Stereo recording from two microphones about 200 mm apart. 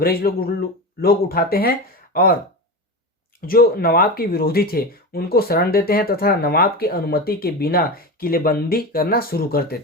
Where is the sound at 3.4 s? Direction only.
45° left (ahead or behind).